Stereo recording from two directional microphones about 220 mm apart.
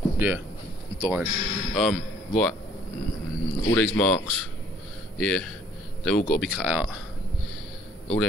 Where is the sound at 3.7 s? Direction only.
5° left (ahead or behind).